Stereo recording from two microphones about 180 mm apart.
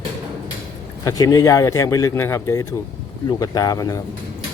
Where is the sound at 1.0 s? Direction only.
20° left (ahead or behind).